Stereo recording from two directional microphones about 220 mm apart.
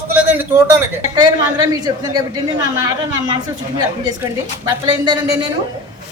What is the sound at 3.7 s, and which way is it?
A woman's voice, 20° right (ahead or behind).